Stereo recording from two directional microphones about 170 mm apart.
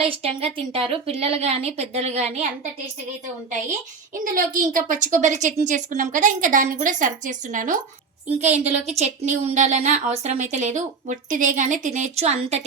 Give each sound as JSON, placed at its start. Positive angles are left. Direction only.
{"t": 0.0, "sound": "a woman's voice", "side_deg": -35}
{"t": 4.2, "sound": "speech", "side_deg": -55}